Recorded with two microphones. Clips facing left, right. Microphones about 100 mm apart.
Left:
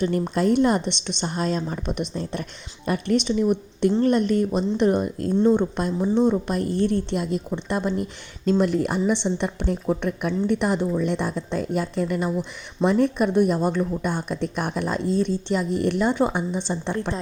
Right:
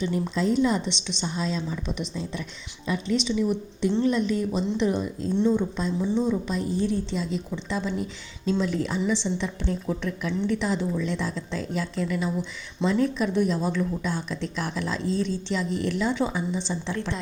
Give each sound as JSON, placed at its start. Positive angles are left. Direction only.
{"t": 0.0, "sound": "speech", "side_deg": 60}
{"t": 5.5, "sound": "speech", "side_deg": 60}